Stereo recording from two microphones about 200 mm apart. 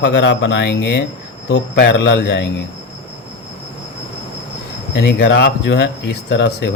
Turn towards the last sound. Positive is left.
turn(degrees=55)  # may be behind; listen again after turning